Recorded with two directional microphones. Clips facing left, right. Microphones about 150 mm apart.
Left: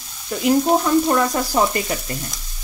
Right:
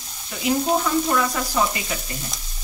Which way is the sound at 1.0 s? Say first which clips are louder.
Left 4 dB; 40° left (ahead or behind).